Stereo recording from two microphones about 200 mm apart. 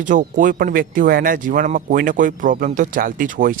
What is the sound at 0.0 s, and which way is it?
Speech, 40° right (ahead or behind).